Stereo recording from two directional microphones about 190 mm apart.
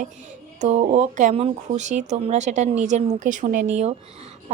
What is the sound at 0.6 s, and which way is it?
Speech, 35° right (ahead or behind).